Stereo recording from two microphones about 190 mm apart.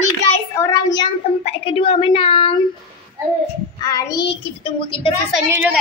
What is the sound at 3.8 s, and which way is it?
A child's voice, 20° left (ahead or behind).